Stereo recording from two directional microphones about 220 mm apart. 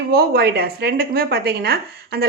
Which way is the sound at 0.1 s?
45° right (ahead or behind).